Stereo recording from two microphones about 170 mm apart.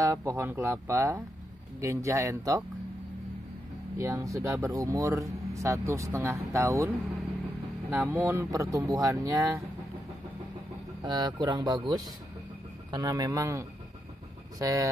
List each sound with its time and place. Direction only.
0.0 s speech: 15° right (ahead or behind)
4.0 s speech: 15° right (ahead or behind)
11.0 s speech: 25° right (ahead or behind)